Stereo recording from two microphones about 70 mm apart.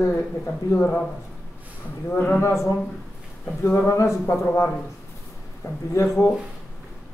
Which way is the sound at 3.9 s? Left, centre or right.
Left.